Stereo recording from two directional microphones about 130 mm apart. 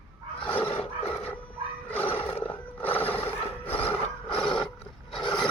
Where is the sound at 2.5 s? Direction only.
15° left (ahead or behind).